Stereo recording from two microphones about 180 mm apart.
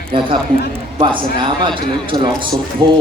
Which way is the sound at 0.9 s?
25° right (ahead or behind).